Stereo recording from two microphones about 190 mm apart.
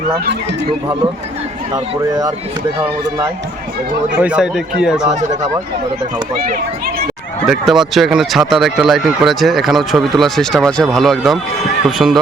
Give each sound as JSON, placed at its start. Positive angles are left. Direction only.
{"t": 1.7, "sound": "speech", "side_deg": -20}
{"t": 4.2, "sound": "speech", "side_deg": -5}
{"t": 7.4, "sound": "speech", "side_deg": 0}